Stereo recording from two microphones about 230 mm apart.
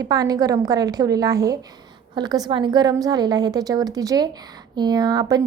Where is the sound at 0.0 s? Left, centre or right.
Centre.